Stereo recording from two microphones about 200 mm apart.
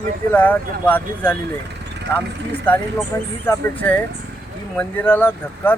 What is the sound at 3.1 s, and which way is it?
Speech, 15° left (ahead or behind).